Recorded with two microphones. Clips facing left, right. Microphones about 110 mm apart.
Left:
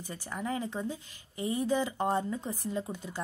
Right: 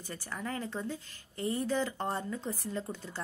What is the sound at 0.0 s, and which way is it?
Speech, 15° left (ahead or behind).